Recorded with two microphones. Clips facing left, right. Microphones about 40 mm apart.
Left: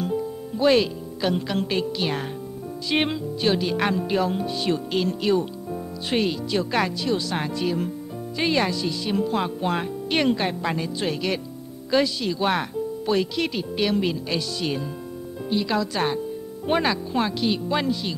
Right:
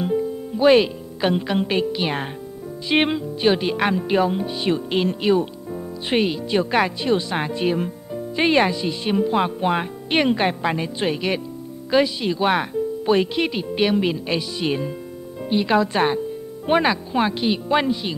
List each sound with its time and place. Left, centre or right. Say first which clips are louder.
0.0 s speech: right 4 dB; right
16.6 s speech: right 4 dB; centre